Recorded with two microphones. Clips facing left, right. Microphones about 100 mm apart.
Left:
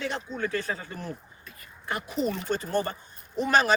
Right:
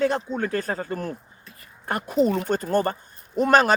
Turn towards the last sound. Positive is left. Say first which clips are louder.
# right 5 dB
turn(degrees=-50)  # may be behind; listen again after turning